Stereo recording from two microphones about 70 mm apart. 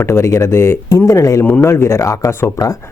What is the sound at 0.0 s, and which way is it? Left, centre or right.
Speech, left.